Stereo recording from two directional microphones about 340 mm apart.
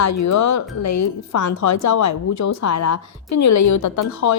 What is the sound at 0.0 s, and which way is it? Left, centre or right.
A woman's voice, left.